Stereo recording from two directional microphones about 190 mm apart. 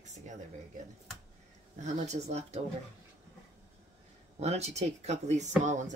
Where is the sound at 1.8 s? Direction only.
35° right (ahead or behind).